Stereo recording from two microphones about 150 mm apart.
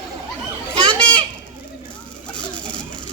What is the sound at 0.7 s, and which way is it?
Children playing, 35° right (ahead or behind).